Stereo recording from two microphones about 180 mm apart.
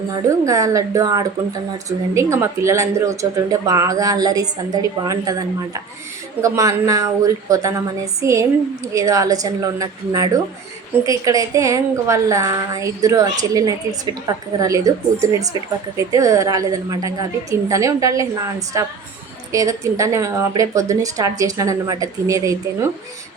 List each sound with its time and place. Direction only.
0.3 s a woman's voice: 20° right (ahead or behind)
19.5 s a woman's voice: 15° right (ahead or behind)